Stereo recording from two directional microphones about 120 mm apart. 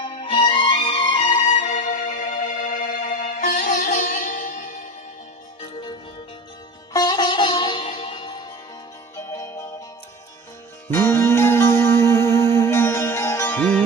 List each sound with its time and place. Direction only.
0.0 s music: 35° left (ahead or behind)
0.3 s music: 50° left (ahead or behind)
1.5 s music: 80° left
6.9 s music: 35° left (ahead or behind)
9.1 s music: 25° left (ahead or behind)
10.9 s music: 20° left (ahead or behind)
13.5 s music: 10° left (ahead or behind)